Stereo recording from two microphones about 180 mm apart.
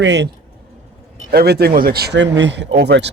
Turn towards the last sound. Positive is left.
turn(degrees=-70)  # may be behind; listen again after turning